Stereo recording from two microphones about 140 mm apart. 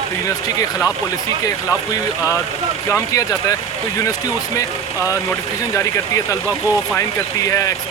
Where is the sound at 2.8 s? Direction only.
20° left (ahead or behind).